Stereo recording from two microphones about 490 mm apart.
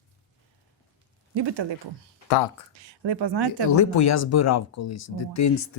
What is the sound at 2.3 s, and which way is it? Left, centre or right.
Speech, left.